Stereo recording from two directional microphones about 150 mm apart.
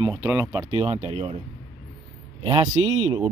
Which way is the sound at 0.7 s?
45° right (ahead or behind).